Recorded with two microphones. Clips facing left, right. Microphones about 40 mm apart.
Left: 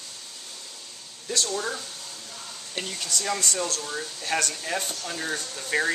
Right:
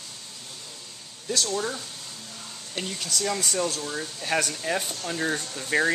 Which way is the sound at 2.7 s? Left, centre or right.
Centre.